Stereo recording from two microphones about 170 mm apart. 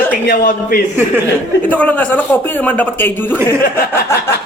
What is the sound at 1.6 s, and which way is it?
A man's voice, 10° left (ahead or behind).